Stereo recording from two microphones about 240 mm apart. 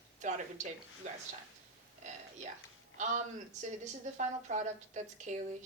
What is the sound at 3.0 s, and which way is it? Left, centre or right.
A woman's voice, right.